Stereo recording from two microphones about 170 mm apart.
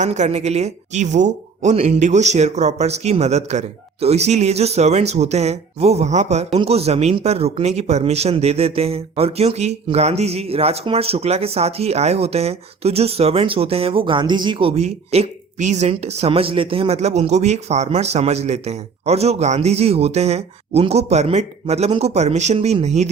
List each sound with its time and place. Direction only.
0.0 s speech: 45° right (ahead or behind)